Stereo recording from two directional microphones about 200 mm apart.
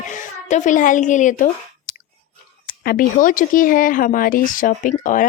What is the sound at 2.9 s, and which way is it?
A woman's voice, 45° left (ahead or behind).